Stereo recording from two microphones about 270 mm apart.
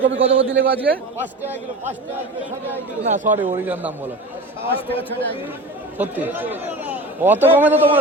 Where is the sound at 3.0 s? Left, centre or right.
Right.